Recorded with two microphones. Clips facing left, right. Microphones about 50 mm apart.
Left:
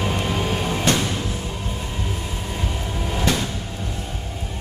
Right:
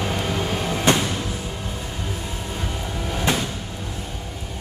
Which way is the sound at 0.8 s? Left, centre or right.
Centre.